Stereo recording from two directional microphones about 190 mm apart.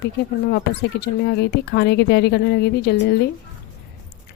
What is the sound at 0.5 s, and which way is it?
Speech, 55° left (ahead or behind).